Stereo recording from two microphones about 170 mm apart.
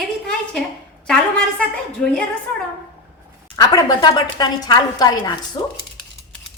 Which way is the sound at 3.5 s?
20° left (ahead or behind).